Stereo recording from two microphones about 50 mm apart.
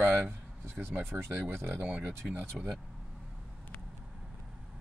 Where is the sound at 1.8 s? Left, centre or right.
Right.